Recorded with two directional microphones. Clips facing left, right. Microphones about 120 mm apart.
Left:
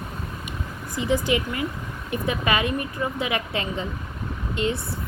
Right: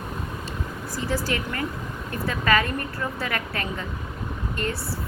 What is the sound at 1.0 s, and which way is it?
A woman's voice, 20° left (ahead or behind).